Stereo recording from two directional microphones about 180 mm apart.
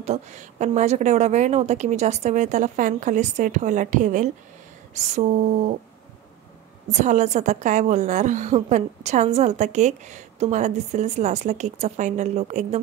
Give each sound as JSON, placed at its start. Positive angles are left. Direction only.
{"t": 0.0, "sound": "a woman's voice", "side_deg": -40}
{"t": 6.9, "sound": "a woman's voice", "side_deg": -40}